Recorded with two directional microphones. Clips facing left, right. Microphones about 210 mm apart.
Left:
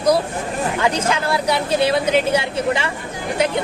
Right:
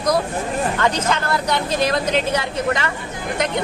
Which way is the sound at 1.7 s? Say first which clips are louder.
Left 3 dB; 30° left (ahead or behind).